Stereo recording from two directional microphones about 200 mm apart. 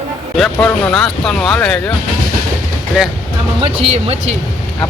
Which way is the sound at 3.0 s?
5° right (ahead or behind).